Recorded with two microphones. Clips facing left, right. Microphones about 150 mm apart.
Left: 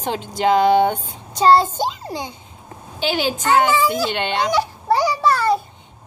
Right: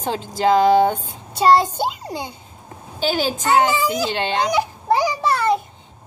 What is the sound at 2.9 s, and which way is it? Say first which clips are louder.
Speech: even; 40° right (ahead or behind).